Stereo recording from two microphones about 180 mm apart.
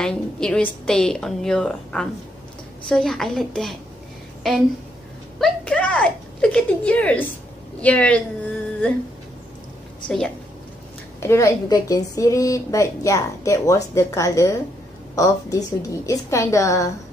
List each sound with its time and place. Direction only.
0.0 s a woman's voice: 5° left (ahead or behind)
10.0 s a woman's voice: 5° left (ahead or behind)
11.1 s a woman's voice: 15° left (ahead or behind)